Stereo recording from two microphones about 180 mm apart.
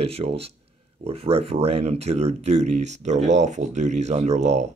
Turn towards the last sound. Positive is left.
turn(degrees=-40)  # may be behind; listen again after turning